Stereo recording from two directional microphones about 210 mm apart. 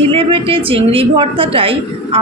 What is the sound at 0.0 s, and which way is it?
A man's voice, 25° right (ahead or behind).